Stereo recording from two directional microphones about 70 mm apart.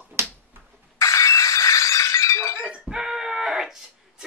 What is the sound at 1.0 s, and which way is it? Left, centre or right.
Glass, left.